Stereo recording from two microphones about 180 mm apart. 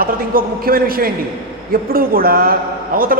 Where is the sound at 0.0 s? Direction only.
55° right (ahead or behind).